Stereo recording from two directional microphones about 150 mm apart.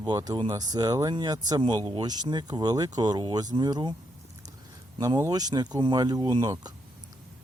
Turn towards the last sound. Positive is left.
turn(degrees=-30)  # may be behind; listen again after turning